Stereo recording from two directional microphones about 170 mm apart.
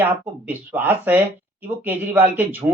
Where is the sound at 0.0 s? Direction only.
10° right (ahead or behind).